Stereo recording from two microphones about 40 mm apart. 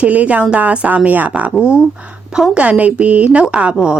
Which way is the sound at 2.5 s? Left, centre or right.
Right.